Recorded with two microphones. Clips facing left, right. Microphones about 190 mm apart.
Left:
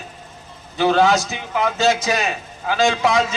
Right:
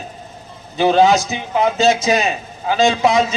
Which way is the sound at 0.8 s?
20° right (ahead or behind).